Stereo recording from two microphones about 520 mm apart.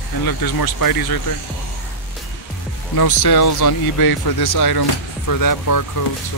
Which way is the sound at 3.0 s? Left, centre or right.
Left.